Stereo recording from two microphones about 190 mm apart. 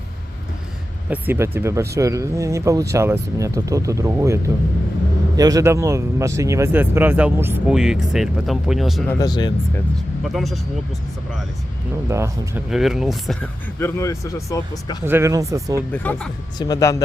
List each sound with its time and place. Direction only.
1.1 s speech: 10° right (ahead or behind)
5.4 s speech: 20° right (ahead or behind); by 9.0 s centre (ahead or behind)
9.0 s speech: 20° left (ahead or behind)
10.2 s speech: centre (ahead or behind)
12.0 s speech: 15° right (ahead or behind)
12.7 s speech: centre (ahead or behind)
13.7 s speech: 15° left (ahead or behind)
15.0 s speech: 15° right (ahead or behind)
15.9 s speech: 5° left (ahead or behind)
16.6 s speech: 20° left (ahead or behind)